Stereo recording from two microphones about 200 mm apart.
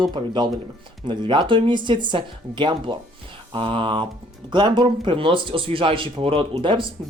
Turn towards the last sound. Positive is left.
turn(degrees=-25)  # may be behind; listen again after turning